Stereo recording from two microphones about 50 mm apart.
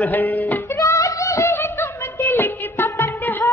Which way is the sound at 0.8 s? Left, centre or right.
Left.